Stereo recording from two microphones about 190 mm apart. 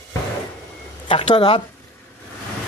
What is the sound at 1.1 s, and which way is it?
Speech, 30° left (ahead or behind).